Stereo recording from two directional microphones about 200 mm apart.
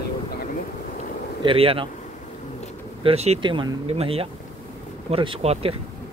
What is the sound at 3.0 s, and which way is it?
Speech, 30° right (ahead or behind).